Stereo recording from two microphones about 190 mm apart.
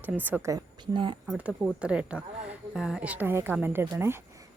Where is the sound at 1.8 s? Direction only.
5° right (ahead or behind).